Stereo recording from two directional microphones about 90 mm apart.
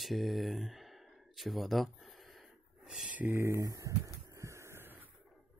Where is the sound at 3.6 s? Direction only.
40° right (ahead or behind); by 5.1 s 20° right (ahead or behind).